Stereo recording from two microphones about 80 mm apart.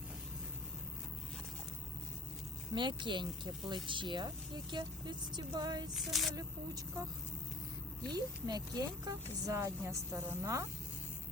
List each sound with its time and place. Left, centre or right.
2.7 s speech: right
3.8 s speech: right
5.9 s a sound: centre
8.1 s speech: right
9.6 s a woman's voice: right